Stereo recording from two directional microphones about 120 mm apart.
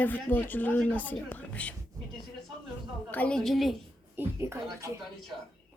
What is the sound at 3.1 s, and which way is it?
Speech, 10° left (ahead or behind).